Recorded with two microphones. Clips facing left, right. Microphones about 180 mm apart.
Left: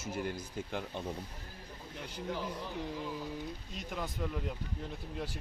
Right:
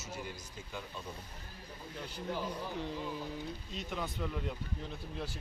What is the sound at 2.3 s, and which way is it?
Speech, 10° right (ahead or behind).